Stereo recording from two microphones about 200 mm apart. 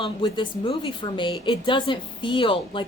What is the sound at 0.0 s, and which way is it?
A woman's voice, 25° left (ahead or behind).